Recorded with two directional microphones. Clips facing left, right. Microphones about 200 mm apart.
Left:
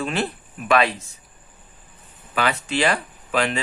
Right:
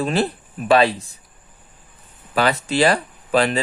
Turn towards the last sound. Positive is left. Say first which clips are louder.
# right 5 dB
turn(degrees=-35)  # may be behind; listen again after turning